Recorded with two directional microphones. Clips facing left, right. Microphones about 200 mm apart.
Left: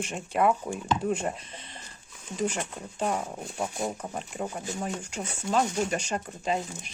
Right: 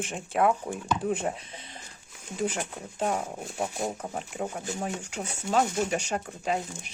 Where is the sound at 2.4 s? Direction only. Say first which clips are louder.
Even; 5° right (ahead or behind).